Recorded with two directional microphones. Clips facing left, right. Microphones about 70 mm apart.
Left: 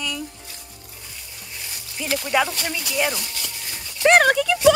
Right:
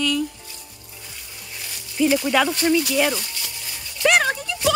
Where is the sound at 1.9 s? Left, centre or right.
Centre.